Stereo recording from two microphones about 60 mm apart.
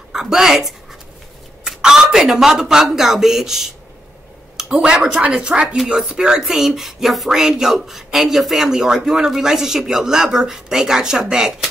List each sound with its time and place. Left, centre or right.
0.1 s speech: centre